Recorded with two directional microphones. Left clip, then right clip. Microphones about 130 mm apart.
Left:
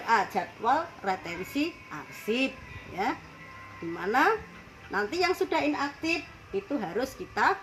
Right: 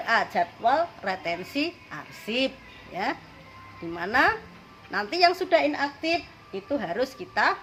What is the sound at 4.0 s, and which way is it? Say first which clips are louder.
A woman's voice: right 2 dB; 30° right (ahead or behind).